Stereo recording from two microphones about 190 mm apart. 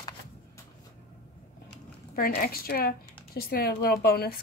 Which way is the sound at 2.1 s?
50° left (ahead or behind).